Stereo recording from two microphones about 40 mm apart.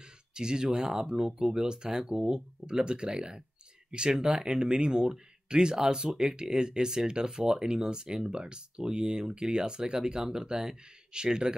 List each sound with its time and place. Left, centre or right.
0.0 s speech: centre